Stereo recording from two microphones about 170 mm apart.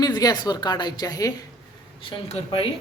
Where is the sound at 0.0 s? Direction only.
25° left (ahead or behind).